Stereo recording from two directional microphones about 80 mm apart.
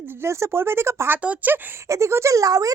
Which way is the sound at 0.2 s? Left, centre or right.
Right.